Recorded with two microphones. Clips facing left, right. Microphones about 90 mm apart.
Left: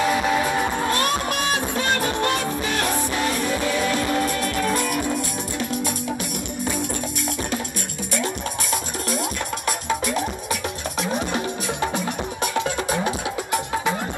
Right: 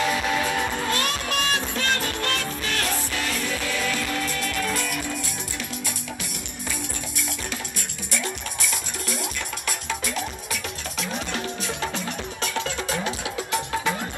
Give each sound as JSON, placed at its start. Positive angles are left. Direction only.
{"t": 0.0, "sound": "music", "side_deg": 15}
{"t": 9.7, "sound": "music", "side_deg": 15}